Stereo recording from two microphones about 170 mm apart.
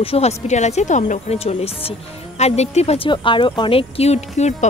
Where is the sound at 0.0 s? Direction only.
35° left (ahead or behind).